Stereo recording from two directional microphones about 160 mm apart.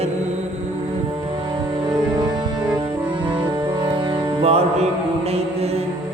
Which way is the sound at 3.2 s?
30° right (ahead or behind).